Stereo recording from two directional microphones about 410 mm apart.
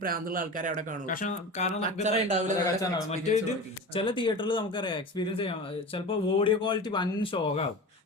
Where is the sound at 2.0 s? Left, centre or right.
Centre.